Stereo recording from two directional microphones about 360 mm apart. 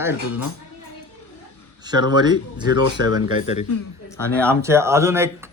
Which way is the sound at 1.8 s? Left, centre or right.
Centre.